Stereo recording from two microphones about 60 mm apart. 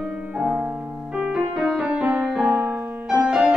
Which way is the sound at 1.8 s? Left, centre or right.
Centre.